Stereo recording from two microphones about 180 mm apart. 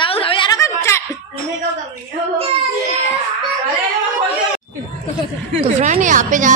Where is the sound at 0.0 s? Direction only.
30° left (ahead or behind).